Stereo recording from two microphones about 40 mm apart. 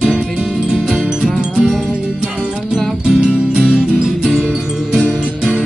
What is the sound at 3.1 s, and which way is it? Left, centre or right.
Music, centre.